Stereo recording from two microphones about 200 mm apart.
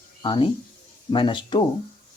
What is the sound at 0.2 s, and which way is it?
Speech, 25° left (ahead or behind).